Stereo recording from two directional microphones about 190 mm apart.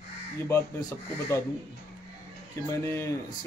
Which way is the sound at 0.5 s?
15° left (ahead or behind).